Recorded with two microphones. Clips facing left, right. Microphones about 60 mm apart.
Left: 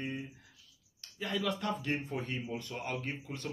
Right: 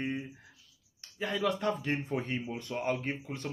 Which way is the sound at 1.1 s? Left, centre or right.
Right.